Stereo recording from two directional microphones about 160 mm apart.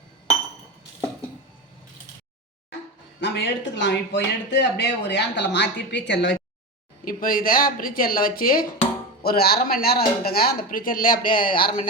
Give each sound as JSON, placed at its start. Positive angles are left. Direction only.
{"t": 3.2, "sound": "speech", "side_deg": 90}
{"t": 7.0, "sound": "speech", "side_deg": 60}